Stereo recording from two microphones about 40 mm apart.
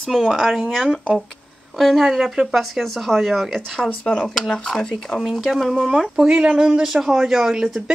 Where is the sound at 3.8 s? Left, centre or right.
Centre.